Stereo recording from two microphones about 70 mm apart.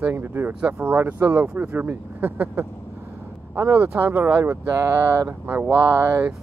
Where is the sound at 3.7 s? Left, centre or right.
Right.